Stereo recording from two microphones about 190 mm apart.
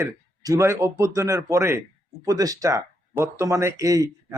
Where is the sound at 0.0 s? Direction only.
15° right (ahead or behind).